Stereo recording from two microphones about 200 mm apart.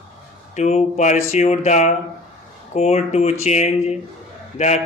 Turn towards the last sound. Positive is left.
turn(degrees=35)  # may be behind; listen again after turning